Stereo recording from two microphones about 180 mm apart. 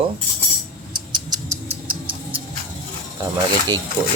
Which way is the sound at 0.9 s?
25° right (ahead or behind).